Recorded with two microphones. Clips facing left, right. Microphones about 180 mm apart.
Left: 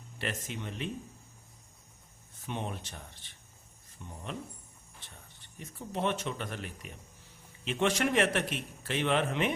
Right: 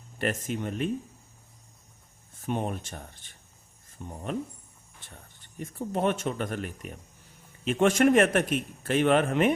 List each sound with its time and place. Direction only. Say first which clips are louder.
0.2 s a man's voice: right 8 dB; 50° right (ahead or behind)
2.4 s a man's voice: right 7 dB; 45° right (ahead or behind)